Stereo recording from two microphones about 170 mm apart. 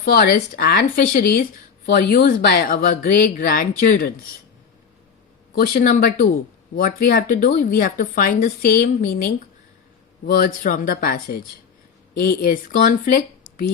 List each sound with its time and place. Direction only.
0.0 s speech: 60° left (ahead or behind)
5.5 s speech: 60° left (ahead or behind)